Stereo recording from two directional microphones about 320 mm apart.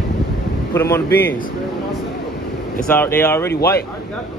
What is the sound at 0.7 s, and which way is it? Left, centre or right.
Speech, centre.